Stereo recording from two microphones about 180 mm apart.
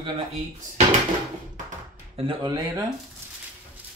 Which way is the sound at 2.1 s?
25° right (ahead or behind).